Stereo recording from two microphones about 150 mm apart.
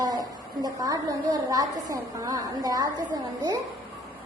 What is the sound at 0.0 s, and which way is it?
A woman's voice, 25° right (ahead or behind).